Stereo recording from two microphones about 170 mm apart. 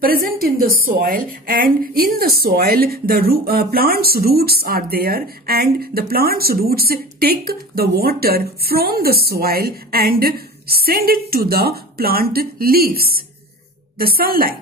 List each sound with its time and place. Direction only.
0.0 s a woman's voice: 60° right (ahead or behind)